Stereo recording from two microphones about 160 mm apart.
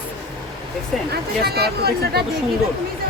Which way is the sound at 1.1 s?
80° right.